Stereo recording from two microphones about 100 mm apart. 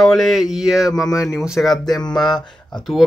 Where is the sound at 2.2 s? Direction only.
45° left (ahead or behind).